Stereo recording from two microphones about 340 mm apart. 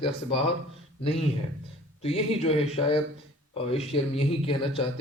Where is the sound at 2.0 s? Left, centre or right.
Centre.